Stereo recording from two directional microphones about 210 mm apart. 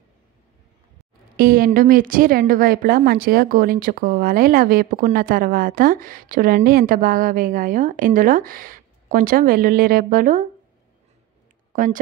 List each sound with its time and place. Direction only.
1.3 s a woman's voice: 45° right (ahead or behind)
11.7 s speech: 40° right (ahead or behind)